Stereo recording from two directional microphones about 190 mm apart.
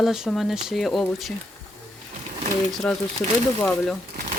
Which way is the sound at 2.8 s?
5° left (ahead or behind).